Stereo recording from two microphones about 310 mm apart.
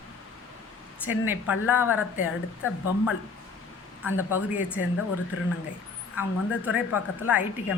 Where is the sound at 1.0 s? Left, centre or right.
Centre.